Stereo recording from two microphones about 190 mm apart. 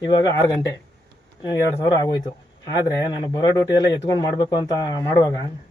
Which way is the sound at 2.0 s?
20° left (ahead or behind).